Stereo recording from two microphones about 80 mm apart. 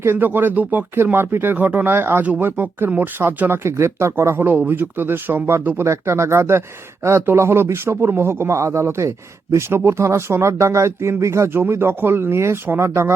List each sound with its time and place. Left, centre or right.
0.0 s a man's voice: right